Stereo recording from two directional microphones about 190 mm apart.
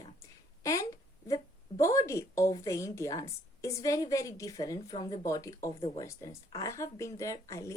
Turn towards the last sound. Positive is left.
turn(degrees=15)  # may be behind; listen again after turning